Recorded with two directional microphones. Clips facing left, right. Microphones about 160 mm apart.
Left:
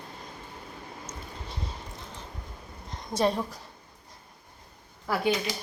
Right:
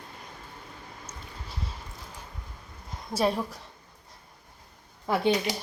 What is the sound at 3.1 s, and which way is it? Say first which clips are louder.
Speech: even; 5° right (ahead or behind).